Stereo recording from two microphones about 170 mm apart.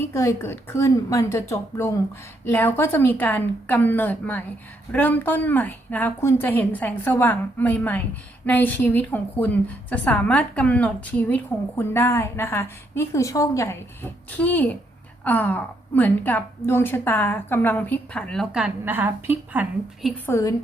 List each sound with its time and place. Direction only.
0.0 s a woman's voice: 15° left (ahead or behind); by 19.6 s 10° right (ahead or behind)
20.2 s a woman's voice: 15° left (ahead or behind)